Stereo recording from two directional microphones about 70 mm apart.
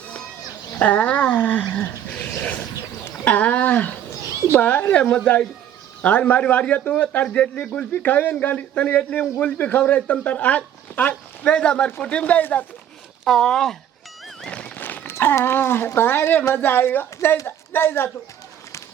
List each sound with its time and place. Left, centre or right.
0.8 s a man's voice: centre
13.2 s speech: centre
14.4 s neigh: centre
14.8 s a sound: left
15.4 s speech: left